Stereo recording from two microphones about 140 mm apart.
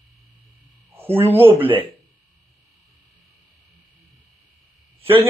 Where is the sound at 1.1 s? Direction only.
15° right (ahead or behind).